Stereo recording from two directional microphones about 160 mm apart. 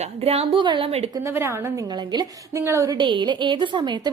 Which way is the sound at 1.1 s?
15° right (ahead or behind).